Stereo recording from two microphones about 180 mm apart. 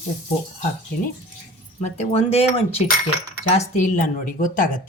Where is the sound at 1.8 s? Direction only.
35° left (ahead or behind).